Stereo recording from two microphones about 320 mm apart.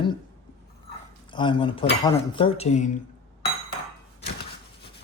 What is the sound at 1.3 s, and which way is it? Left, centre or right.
Speech, centre.